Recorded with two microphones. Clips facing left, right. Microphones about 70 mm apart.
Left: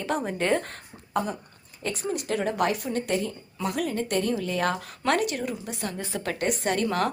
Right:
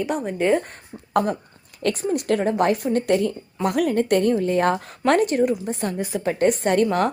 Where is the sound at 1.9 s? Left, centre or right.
Right.